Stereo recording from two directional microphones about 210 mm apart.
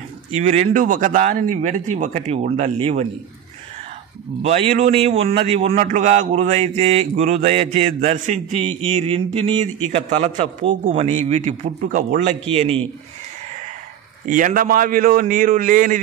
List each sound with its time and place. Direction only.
0.3 s a man's voice: 30° right (ahead or behind)
4.4 s a man's voice: 30° right (ahead or behind)
8.9 s a sound: 25° right (ahead or behind)
9.8 s a man's voice: 35° right (ahead or behind)
14.2 s a man's voice: 40° right (ahead or behind)